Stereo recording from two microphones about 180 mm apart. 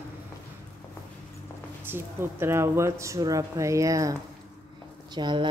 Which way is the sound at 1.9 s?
15° right (ahead or behind).